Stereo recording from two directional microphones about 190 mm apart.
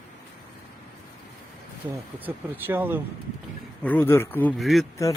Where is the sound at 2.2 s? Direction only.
10° right (ahead or behind).